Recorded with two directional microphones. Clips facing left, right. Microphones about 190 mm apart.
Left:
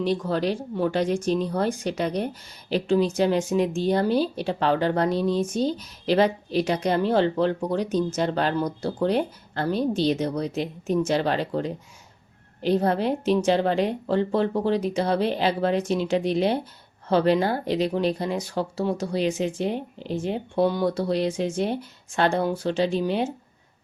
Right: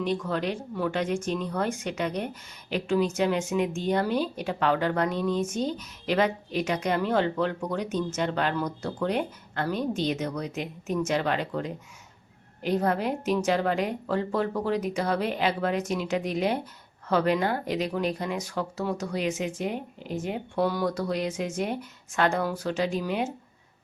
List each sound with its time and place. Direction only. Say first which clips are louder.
0.0 s speech: left 4 dB; 35° left (ahead or behind)